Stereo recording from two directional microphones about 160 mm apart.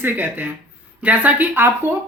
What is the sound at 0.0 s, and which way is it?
Speech, 10° right (ahead or behind).